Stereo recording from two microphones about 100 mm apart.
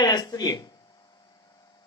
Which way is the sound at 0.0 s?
45° left (ahead or behind).